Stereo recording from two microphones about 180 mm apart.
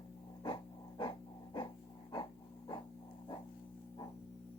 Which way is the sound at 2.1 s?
25° left (ahead or behind).